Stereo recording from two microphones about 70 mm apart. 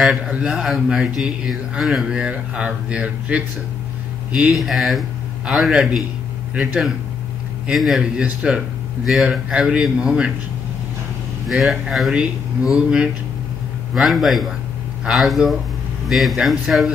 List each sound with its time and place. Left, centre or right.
0.3 s speech: centre
1.5 s speech: centre
4.6 s speech: centre
6.5 s speech: centre
7.7 s speech: centre
11.4 s speech: centre
13.9 s speech: centre